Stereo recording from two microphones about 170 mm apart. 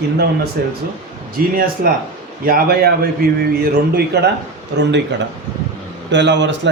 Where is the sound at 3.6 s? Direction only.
70° right (ahead or behind).